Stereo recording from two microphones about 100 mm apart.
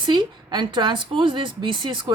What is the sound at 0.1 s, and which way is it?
Speech, 50° right (ahead or behind).